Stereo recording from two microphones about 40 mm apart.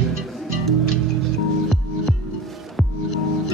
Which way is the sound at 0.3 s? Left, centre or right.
Centre.